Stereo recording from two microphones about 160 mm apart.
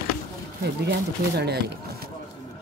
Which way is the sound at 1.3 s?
90° right.